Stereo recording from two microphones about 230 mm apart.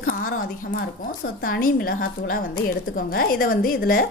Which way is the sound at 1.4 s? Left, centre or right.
Left.